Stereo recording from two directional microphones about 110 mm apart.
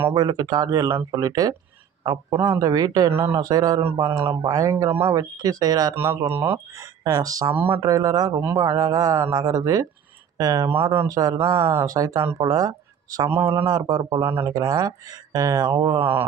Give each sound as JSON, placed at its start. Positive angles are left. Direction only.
{"t": 0.1, "sound": "speech", "side_deg": -40}
{"t": 2.3, "sound": "speech", "side_deg": -25}
{"t": 6.3, "sound": "speech", "side_deg": -20}
{"t": 7.1, "sound": "speech", "side_deg": -30}
{"t": 7.5, "sound": "speech", "side_deg": -20}
{"t": 7.8, "sound": "speech", "side_deg": -35}
{"t": 13.3, "sound": "speech", "side_deg": -20}